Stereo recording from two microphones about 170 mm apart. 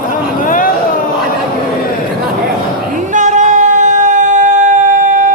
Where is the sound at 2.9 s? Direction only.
45° right (ahead or behind).